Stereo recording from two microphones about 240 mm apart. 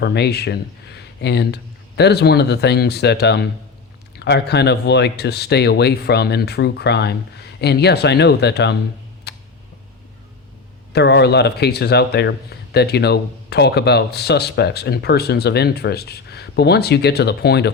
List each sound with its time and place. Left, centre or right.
0.0 s speech: left
9.3 s tick: left
10.9 s speech: left